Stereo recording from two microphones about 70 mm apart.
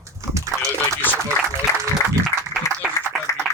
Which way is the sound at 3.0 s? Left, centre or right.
Left.